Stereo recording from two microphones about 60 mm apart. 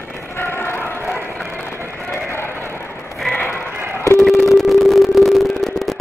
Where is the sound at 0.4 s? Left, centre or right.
Left.